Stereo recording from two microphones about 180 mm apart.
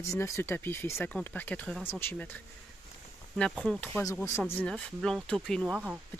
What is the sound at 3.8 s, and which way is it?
Speech, 10° left (ahead or behind).